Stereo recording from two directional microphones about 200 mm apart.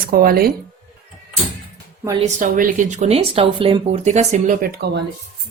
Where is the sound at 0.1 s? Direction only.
50° right (ahead or behind).